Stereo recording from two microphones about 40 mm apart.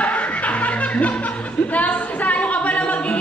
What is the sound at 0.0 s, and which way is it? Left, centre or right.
Music, left.